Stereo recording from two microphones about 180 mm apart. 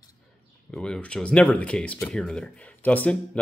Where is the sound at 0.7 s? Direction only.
5° left (ahead or behind).